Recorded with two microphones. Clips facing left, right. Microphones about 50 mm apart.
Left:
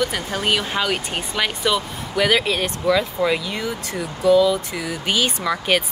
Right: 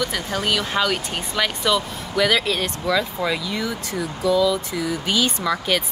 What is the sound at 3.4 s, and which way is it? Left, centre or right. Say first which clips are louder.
Speech: even; left.